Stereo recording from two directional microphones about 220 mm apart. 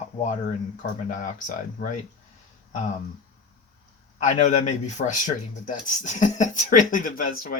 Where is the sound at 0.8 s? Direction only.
35° left (ahead or behind).